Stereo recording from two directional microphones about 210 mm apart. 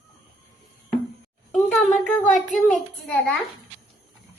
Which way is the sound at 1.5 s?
Centre (ahead or behind).